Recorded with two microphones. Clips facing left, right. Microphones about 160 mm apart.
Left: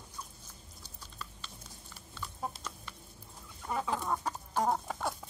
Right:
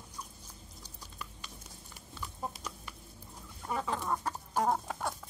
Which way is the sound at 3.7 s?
5° left (ahead or behind).